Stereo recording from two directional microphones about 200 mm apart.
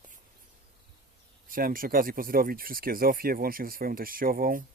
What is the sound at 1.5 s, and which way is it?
Speech, 45° right (ahead or behind).